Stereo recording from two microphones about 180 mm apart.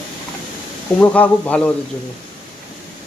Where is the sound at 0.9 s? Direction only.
10° left (ahead or behind).